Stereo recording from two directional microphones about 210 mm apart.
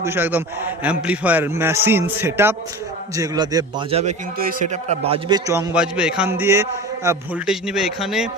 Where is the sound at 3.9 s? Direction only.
30° right (ahead or behind).